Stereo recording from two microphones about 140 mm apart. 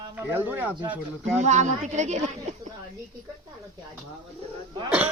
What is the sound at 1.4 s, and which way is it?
Speech, 55° right (ahead or behind).